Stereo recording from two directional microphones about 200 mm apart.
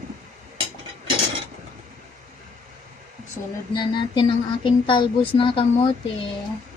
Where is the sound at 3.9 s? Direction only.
25° left (ahead or behind).